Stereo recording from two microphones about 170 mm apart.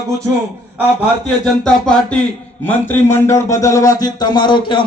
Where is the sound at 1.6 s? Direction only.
5° left (ahead or behind).